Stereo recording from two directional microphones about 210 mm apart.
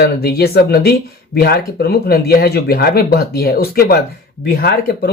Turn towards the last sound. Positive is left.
turn(degrees=45)  # may be behind; listen again after turning